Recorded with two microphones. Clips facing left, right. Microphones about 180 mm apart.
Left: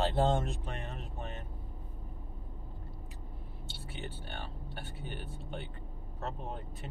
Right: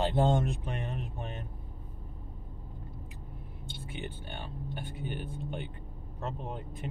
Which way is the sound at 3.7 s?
15° right (ahead or behind).